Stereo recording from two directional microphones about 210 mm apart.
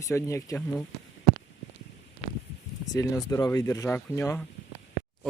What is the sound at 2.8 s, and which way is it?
Speech, 15° left (ahead or behind).